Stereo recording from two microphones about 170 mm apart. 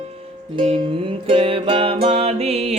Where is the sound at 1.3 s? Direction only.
35° right (ahead or behind).